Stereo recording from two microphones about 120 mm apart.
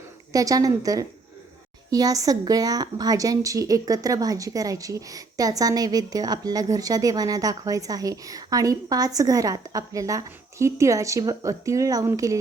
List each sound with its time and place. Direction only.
0.3 s a woman's voice: 30° right (ahead or behind)